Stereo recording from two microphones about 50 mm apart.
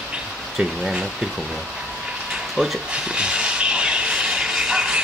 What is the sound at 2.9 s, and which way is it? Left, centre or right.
Vehicle, right.